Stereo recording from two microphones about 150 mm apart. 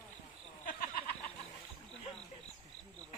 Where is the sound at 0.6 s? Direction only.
70° left (ahead or behind).